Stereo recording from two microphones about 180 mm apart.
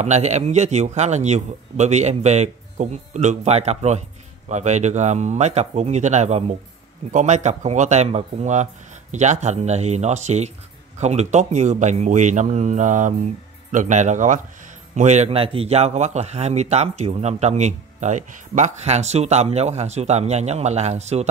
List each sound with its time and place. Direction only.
0.0 s speech: 40° right (ahead or behind)